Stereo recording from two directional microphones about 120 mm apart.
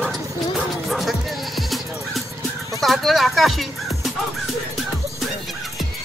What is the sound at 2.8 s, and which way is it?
Speech, centre (ahead or behind).